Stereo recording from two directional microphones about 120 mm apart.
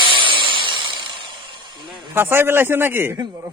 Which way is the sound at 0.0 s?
45° right (ahead or behind).